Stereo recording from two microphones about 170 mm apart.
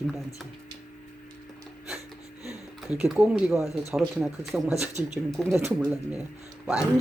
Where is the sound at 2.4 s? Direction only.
20° left (ahead or behind).